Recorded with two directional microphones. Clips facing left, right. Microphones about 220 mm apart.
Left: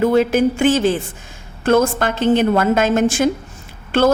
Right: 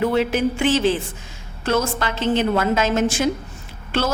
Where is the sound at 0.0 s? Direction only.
45° left (ahead or behind).